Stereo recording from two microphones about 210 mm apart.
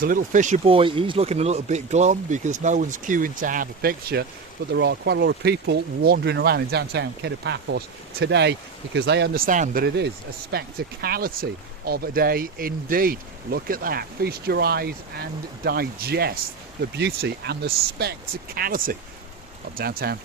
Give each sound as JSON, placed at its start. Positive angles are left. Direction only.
{"t": 0.0, "sound": "speech", "side_deg": -40}